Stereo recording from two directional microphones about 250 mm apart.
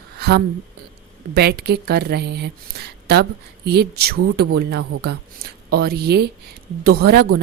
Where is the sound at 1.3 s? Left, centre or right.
Right.